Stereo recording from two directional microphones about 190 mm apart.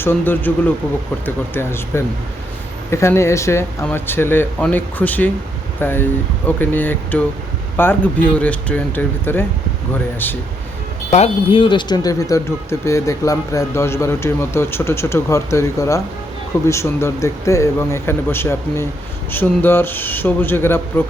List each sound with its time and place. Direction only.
0.0 s speech: 10° left (ahead or behind)
11.1 s speech: 30° left (ahead or behind); by 20.8 s 10° left (ahead or behind)